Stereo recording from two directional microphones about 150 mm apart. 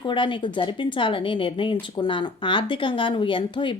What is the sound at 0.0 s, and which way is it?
Speech, 30° left (ahead or behind).